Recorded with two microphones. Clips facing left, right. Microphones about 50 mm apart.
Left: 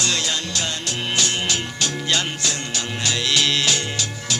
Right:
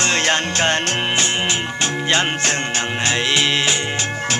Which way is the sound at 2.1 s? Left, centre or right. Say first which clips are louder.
Right 7 dB; right.